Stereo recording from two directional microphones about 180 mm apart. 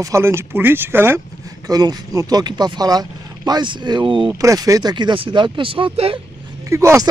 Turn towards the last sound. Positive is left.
turn(degrees=-15)  # may be behind; listen again after turning